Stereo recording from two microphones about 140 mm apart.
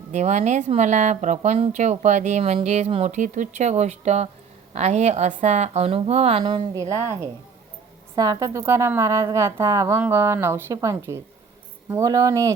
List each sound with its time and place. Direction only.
0.1 s a woman's voice: 55° right (ahead or behind)
8.1 s a woman's voice: 25° right (ahead or behind)